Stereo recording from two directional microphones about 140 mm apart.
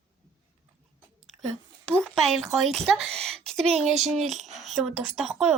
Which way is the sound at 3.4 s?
5° left (ahead or behind).